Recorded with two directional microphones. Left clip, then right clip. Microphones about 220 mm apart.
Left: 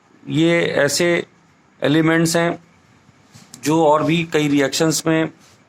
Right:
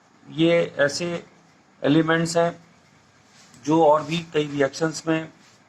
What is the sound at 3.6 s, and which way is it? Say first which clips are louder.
Speech: left 3 dB; 40° left (ahead or behind).